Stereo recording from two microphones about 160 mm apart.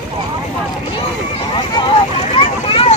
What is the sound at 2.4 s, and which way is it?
Vehicle, 35° left (ahead or behind).